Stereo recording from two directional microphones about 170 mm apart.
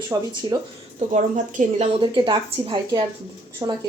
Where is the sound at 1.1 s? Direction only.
45° right (ahead or behind).